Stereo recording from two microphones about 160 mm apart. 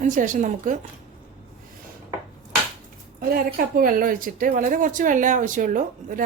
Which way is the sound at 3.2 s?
65° right (ahead or behind).